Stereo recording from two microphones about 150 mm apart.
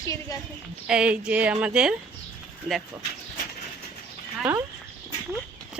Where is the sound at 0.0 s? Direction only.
20° left (ahead or behind).